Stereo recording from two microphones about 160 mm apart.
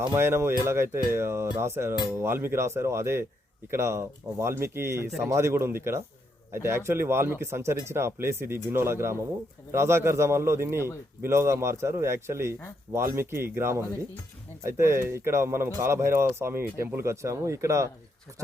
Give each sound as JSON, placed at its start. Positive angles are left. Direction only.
{"t": 0.1, "sound": "speech", "side_deg": -15}